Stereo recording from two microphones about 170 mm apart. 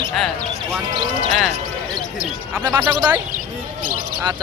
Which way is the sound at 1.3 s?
Centre (ahead or behind).